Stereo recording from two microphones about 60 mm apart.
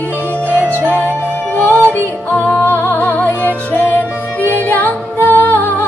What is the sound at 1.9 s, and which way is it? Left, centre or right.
Music, left.